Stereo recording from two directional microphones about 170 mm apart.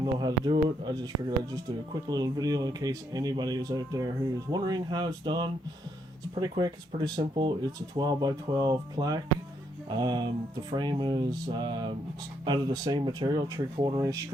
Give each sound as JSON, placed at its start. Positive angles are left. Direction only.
{"t": 0.0, "sound": "speech", "side_deg": -25}